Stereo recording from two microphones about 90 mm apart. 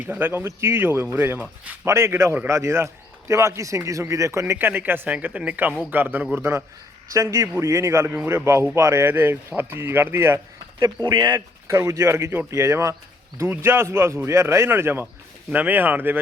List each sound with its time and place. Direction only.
0.0 s a man's voice: 20° right (ahead or behind)
11.0 s speech: 50° right (ahead or behind)
11.7 s a man's voice: 35° right (ahead or behind)